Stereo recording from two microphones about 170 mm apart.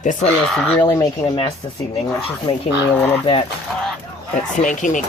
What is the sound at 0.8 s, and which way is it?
Speech, 25° left (ahead or behind).